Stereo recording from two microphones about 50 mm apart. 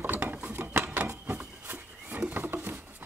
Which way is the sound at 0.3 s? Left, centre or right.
Right.